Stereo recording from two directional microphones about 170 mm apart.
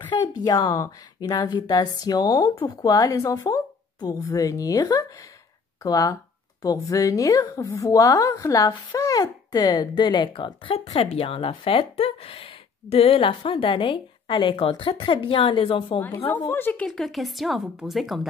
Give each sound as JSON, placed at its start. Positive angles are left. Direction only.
{"t": 0.1, "sound": "a woman's voice", "side_deg": 25}
{"t": 16.3, "sound": "a woman's voice", "side_deg": 15}